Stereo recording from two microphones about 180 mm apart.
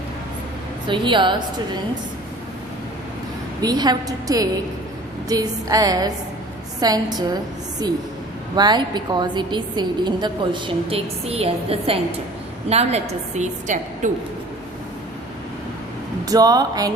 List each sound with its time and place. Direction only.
0.9 s a woman's voice: 25° right (ahead or behind)
3.6 s a woman's voice: 20° right (ahead or behind)
8.5 s a woman's voice: 25° right (ahead or behind); by 14.1 s 40° right (ahead or behind)
16.2 s a woman's voice: 20° right (ahead or behind)